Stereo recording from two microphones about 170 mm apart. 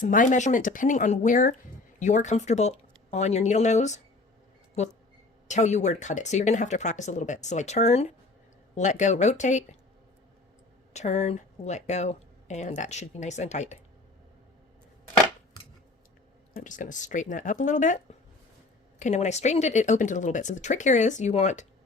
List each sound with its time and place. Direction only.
0.0 s speech: 50° left (ahead or behind)
5.5 s speech: 45° left (ahead or behind)
10.9 s speech: 40° left (ahead or behind)
16.6 s speech: 50° left (ahead or behind)